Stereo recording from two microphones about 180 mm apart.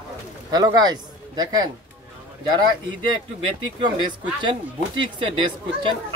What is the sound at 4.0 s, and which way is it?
Speech, 25° right (ahead or behind).